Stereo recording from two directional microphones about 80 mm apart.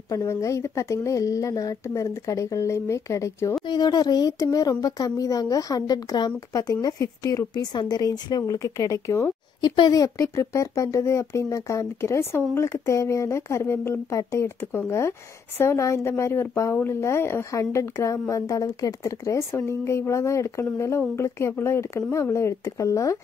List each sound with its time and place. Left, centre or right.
0.1 s speech: left
3.6 s a woman's voice: left
9.6 s a woman's voice: left